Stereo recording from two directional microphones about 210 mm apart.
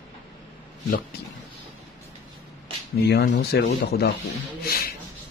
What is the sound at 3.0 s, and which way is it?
Speech, 50° left (ahead or behind).